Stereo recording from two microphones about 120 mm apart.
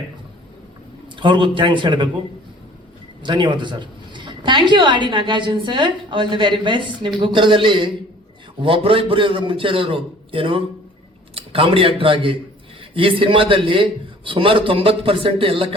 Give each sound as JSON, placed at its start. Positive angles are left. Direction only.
{"t": 1.1, "sound": "a man's voice", "side_deg": -40}
{"t": 3.2, "sound": "a woman's voice", "side_deg": -40}